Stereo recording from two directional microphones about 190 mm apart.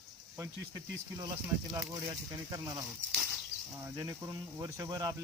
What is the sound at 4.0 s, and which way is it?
Speech, 15° right (ahead or behind).